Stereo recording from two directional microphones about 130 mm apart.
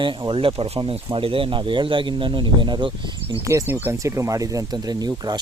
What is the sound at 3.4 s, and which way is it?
Speech, 20° right (ahead or behind).